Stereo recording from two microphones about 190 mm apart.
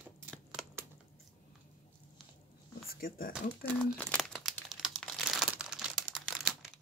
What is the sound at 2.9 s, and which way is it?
Speech, 50° left (ahead or behind).